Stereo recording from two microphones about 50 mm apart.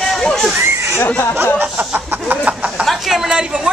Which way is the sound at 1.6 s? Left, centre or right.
Right.